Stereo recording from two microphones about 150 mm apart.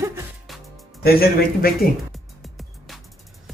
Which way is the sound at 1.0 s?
90° left.